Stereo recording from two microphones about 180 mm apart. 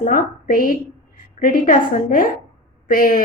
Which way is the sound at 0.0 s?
50° left (ahead or behind).